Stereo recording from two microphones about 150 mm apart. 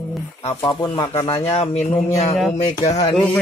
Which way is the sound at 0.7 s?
40° left (ahead or behind).